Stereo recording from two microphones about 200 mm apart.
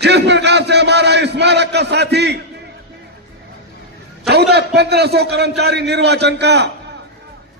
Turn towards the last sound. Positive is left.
turn(degrees=-60)  # may be behind; listen again after turning